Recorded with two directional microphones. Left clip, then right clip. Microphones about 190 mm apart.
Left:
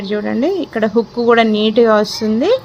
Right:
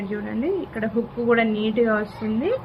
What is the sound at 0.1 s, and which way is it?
A woman's voice, 65° left (ahead or behind).